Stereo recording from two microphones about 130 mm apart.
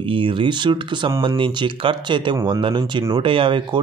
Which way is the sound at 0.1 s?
40° right (ahead or behind).